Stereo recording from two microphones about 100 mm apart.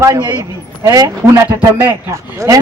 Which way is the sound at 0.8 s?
35° right (ahead or behind).